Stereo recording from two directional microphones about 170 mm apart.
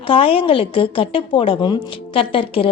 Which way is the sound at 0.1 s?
30° left (ahead or behind).